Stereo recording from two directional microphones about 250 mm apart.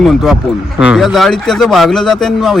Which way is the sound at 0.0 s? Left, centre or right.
Centre.